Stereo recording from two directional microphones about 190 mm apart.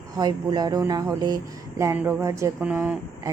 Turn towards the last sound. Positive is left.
turn(degrees=-10)  # may be behind; listen again after turning